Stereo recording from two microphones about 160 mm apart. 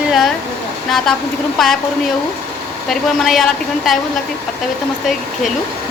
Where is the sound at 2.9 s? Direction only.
Centre (ahead or behind).